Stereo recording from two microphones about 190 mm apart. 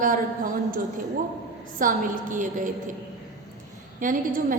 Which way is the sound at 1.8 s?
45° right (ahead or behind).